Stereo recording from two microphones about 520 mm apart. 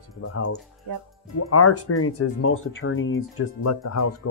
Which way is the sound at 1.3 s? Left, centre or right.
Left.